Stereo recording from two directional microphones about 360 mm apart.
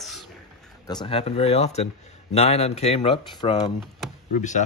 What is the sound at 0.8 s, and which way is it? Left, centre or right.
A man's voice, centre.